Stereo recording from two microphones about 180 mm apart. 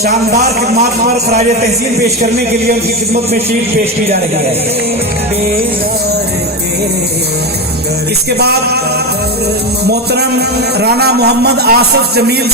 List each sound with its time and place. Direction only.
0.0 s a man's voice: 60° right (ahead or behind)
8.4 s a man's voice: 65° right (ahead or behind)
9.8 s a man's voice: 65° right (ahead or behind)